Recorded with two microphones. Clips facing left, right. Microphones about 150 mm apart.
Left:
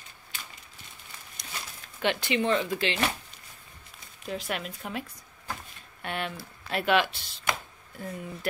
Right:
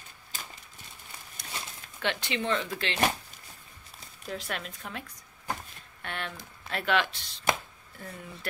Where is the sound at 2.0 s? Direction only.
15° left (ahead or behind).